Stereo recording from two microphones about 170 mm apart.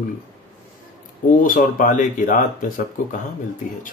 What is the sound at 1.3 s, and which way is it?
Speech, 50° left (ahead or behind).